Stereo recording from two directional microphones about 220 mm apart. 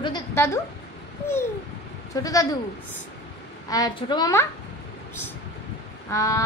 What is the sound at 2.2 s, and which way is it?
Speech, 15° left (ahead or behind).